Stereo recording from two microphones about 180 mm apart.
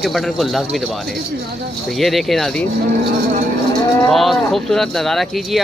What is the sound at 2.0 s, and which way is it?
Speech, centre (ahead or behind).